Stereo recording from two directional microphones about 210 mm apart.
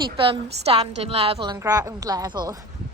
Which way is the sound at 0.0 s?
25° right (ahead or behind).